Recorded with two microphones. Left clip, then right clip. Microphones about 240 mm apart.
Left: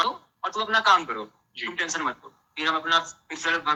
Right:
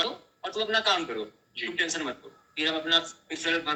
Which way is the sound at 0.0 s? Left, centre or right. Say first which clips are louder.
Left 5 dB; centre.